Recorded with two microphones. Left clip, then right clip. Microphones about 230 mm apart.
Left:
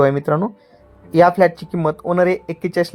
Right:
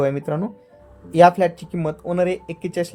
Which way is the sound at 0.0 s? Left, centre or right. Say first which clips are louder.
Left 6 dB; left.